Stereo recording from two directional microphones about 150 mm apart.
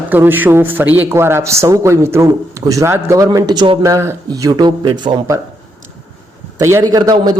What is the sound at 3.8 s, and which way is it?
Speech, 20° right (ahead or behind).